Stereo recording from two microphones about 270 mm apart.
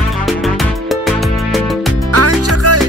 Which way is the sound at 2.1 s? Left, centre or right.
Right.